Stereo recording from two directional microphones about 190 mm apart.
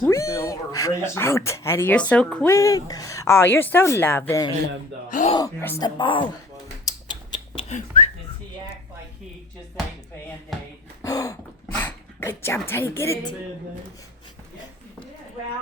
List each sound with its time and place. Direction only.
0.0 s speech: 15° left (ahead or behind)
5.0 s speech: 45° left (ahead or behind)
5.3 s speech: 15° left (ahead or behind)
6.8 s a sound: 25° left (ahead or behind)
7.7 s whistling: 40° left (ahead or behind)
10.5 s a sound: centre (ahead or behind)
11.0 s gasp: 20° left (ahead or behind)
11.7 s dog: 10° left (ahead or behind)
12.6 s speech: 10° left (ahead or behind)